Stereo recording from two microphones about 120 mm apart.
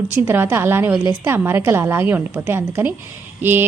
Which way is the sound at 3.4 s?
15° right (ahead or behind).